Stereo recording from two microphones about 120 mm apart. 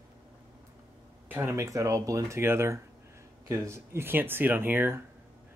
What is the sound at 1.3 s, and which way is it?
A man's voice, 20° right (ahead or behind).